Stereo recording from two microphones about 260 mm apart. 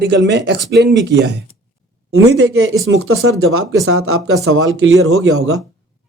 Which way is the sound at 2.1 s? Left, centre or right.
Right.